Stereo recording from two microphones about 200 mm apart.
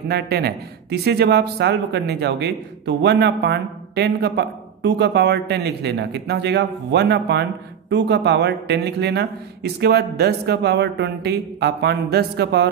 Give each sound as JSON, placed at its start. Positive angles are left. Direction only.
{"t": 0.1, "sound": "speech", "side_deg": -55}